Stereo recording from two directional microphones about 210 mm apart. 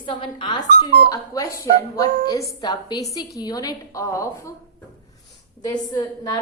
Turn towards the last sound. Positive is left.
turn(degrees=20)  # may be behind; listen again after turning